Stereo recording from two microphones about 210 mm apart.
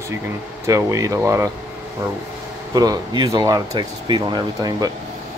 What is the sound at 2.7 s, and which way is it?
Speech, 20° right (ahead or behind).